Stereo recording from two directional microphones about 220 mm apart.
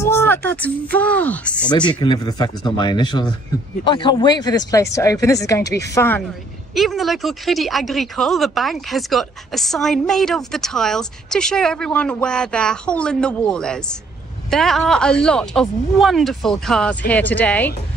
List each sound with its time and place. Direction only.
0.0 s speech: 10° left (ahead or behind)
1.7 s speech: 20° left (ahead or behind)
6.7 s speech: centre (ahead or behind)